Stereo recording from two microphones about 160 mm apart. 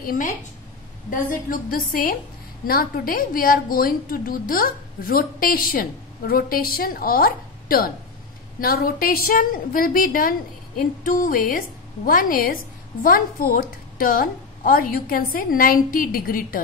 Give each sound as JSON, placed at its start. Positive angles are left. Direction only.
{"t": 0.0, "sound": "a woman's voice", "side_deg": 60}